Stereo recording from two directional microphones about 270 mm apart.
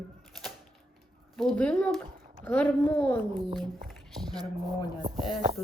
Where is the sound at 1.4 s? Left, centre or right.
Centre.